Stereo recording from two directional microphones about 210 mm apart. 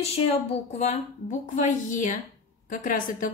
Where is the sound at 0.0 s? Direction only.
30° left (ahead or behind).